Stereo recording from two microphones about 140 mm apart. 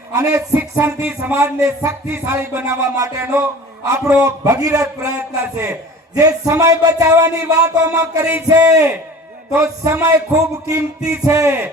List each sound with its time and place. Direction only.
0.1 s speech: 20° right (ahead or behind)
9.8 s speech: 20° right (ahead or behind)